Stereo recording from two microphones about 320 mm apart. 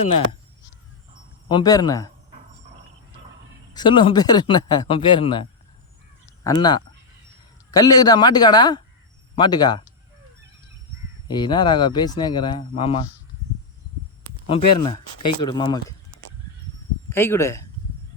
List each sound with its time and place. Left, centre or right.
0.0 s speech: centre
1.5 s speech: centre
3.8 s speech: centre
11.3 s speech: centre
15.4 s speech: centre
17.1 s speech: centre